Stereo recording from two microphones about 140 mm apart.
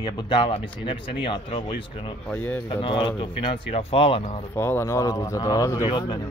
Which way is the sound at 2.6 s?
35° left (ahead or behind).